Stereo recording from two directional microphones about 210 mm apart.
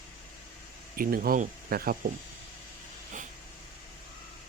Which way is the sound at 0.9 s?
45° right (ahead or behind).